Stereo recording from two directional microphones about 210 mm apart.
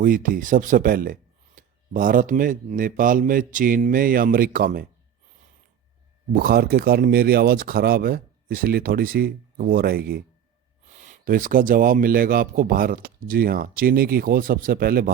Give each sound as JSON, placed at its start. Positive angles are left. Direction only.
{"t": 0.0, "sound": "speech", "side_deg": -40}
{"t": 6.4, "sound": "speech", "side_deg": -45}
{"t": 10.8, "sound": "speech", "side_deg": -35}